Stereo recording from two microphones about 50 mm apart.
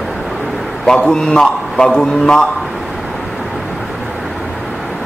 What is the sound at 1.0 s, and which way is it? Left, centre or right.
A man's voice, centre.